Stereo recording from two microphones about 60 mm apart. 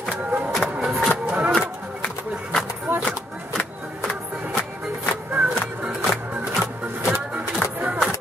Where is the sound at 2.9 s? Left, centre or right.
Right.